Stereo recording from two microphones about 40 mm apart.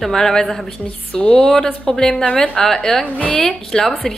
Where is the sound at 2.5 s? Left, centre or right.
Centre.